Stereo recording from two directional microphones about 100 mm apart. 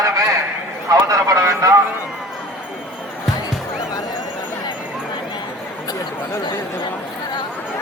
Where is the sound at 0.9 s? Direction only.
35° right (ahead or behind).